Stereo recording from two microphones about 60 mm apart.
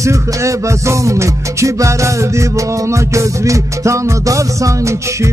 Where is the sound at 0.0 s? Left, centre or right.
Right.